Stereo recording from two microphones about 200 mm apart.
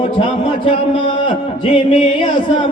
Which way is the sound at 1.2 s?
30° left (ahead or behind).